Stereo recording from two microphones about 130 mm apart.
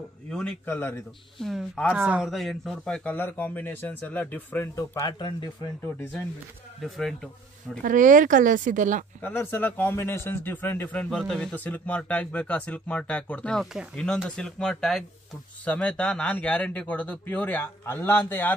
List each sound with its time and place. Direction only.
0.3 s speech: 5° left (ahead or behind)
0.7 s speech: 20° left (ahead or behind)
1.4 s speech: centre (ahead or behind)
2.3 s speech: centre (ahead or behind); by 5.0 s 15° left (ahead or behind)
5.0 s speech: 30° left (ahead or behind)
6.8 s speech: centre (ahead or behind)
7.8 s speech: 90° right
9.2 s speech: 15° left (ahead or behind)
11.1 s speech: 5° left (ahead or behind)